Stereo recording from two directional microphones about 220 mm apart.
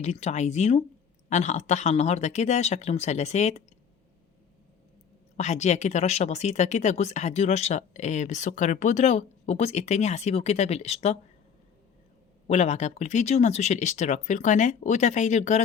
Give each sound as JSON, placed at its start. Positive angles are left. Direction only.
{"t": 0.0, "sound": "speech", "side_deg": 30}
{"t": 5.4, "sound": "speech", "side_deg": 30}
{"t": 12.5, "sound": "speech", "side_deg": 30}